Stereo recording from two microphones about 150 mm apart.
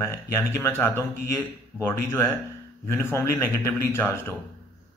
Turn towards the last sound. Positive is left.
turn(degrees=15)  # may be behind; listen again after turning